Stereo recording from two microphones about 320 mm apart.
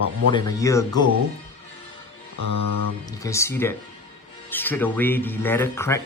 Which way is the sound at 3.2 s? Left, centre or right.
Centre.